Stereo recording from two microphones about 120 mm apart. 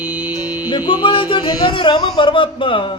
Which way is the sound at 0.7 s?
40° left (ahead or behind).